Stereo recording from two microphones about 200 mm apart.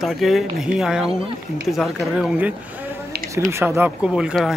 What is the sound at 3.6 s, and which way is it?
Speech, 10° right (ahead or behind).